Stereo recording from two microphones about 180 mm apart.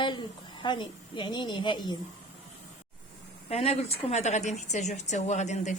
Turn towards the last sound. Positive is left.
turn(degrees=40)  # may be behind; listen again after turning